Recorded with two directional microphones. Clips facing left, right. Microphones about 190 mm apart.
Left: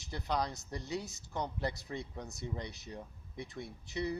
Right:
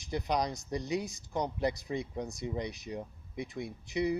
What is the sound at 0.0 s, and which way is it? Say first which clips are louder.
Speech: right 4 dB; 15° right (ahead or behind).